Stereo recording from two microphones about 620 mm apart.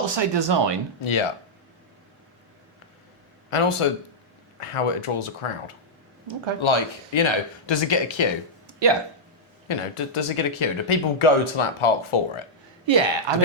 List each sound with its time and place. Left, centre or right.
0.0 s speech: right
1.0 s speech: left
3.5 s speech: left
9.6 s speech: left
12.8 s speech: right